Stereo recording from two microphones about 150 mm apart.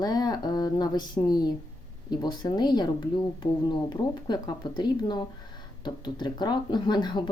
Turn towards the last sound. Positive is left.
turn(degrees=30)  # may be behind; listen again after turning